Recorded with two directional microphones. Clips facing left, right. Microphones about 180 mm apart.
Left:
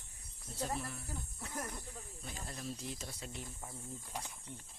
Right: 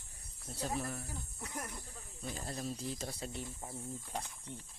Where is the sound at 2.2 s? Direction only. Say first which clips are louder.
Right 7 dB; 35° right (ahead or behind).